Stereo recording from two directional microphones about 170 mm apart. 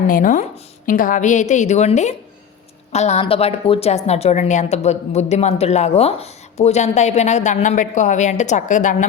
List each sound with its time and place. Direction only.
0.1 s a woman's voice: 50° left (ahead or behind)